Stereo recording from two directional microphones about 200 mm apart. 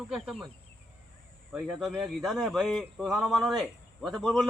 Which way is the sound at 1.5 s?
Centre (ahead or behind).